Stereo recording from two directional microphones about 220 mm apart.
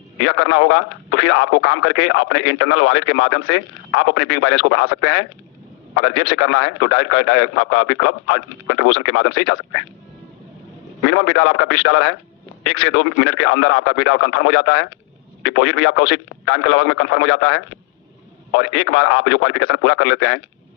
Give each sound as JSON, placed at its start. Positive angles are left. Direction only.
{"t": 0.2, "sound": "speech", "side_deg": 65}
{"t": 11.0, "sound": "speech", "side_deg": 65}